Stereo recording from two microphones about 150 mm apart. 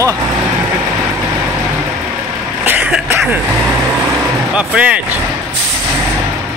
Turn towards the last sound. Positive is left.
turn(degrees=-10)  # may be behind; listen again after turning